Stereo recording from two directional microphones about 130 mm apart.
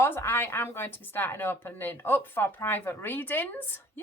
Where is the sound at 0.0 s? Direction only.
20° left (ahead or behind).